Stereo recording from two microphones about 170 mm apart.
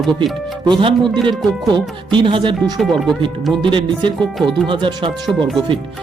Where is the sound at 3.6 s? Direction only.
30° right (ahead or behind).